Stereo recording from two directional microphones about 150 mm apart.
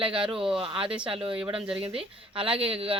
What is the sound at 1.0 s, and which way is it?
Speech, 35° right (ahead or behind).